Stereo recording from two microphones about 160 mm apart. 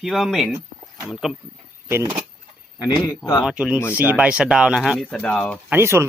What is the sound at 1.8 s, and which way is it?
Speech, 15° right (ahead or behind).